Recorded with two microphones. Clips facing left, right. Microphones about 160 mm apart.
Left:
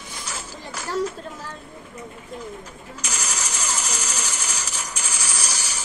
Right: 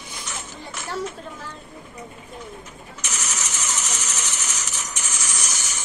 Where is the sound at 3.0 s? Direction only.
35° left (ahead or behind).